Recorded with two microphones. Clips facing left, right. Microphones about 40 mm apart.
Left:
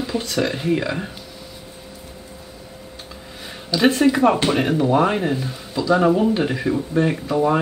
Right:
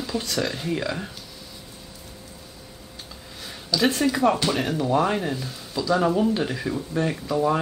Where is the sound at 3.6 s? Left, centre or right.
Left.